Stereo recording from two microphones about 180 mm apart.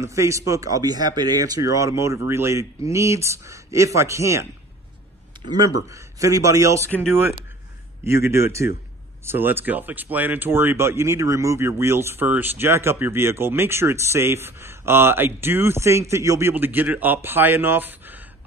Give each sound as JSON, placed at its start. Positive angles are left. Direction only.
{"t": 0.0, "sound": "speech", "side_deg": -15}
{"t": 5.8, "sound": "speech", "side_deg": -15}
{"t": 8.0, "sound": "speech", "side_deg": -15}